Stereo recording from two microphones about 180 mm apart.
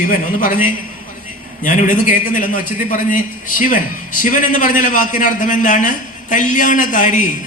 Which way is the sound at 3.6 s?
50° left (ahead or behind).